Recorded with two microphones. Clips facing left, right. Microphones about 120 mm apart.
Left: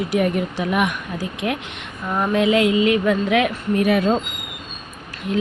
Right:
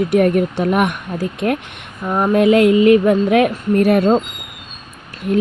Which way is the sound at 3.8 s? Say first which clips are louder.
Right 4 dB; 60° right (ahead or behind).